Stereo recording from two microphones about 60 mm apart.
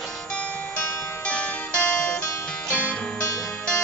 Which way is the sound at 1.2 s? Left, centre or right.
Centre.